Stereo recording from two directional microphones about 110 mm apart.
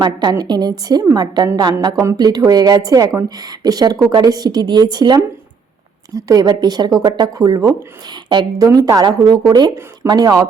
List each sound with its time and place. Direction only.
0.0 s a woman's voice: 40° right (ahead or behind)